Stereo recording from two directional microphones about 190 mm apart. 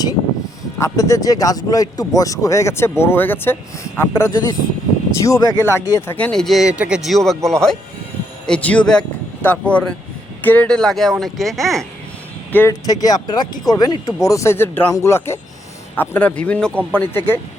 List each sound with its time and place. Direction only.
0.8 s speech: 15° left (ahead or behind)
6.1 s speech: 5° left (ahead or behind)
12.5 s speech: 15° left (ahead or behind)